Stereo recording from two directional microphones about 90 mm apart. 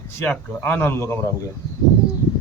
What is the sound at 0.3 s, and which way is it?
Speech, 20° left (ahead or behind).